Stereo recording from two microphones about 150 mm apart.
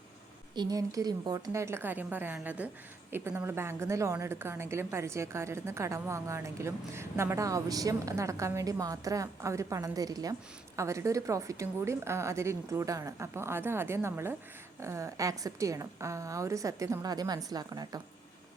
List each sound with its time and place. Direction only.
0.5 s a woman's voice: 25° right (ahead or behind)